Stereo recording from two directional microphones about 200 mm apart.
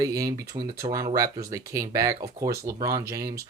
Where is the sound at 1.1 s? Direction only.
15° right (ahead or behind).